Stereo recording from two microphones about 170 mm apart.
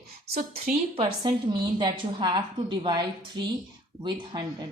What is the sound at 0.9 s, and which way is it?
A woman's voice, 30° right (ahead or behind).